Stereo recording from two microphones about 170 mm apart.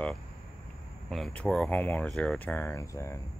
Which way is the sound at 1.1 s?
5° left (ahead or behind).